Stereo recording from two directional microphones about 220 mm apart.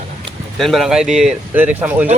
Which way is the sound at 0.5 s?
Centre (ahead or behind).